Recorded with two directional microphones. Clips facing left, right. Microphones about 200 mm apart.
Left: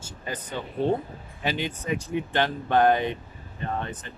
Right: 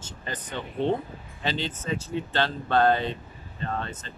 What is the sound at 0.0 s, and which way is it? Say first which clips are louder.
Speech: left 2 dB; 10° left (ahead or behind).